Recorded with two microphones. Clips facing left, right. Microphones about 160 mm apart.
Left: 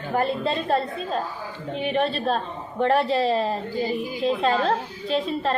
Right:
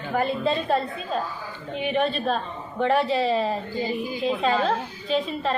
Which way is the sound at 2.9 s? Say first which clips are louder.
Left 1 dB; centre (ahead or behind).